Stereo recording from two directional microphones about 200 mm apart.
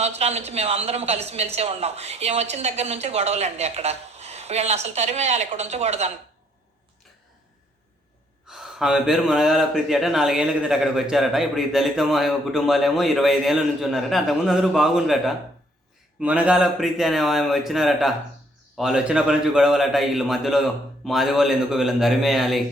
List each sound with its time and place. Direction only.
0.0 s speech: 30° right (ahead or behind)
8.4 s speech: centre (ahead or behind)